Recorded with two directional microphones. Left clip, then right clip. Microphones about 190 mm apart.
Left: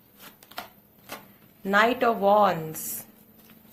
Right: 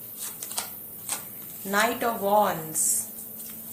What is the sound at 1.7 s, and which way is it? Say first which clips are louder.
Speech: left 3 dB; 45° left (ahead or behind).